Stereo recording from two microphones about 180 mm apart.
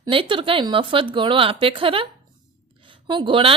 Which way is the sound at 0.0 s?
30° right (ahead or behind).